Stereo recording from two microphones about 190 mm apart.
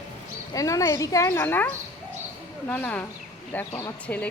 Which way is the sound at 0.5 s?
15° left (ahead or behind).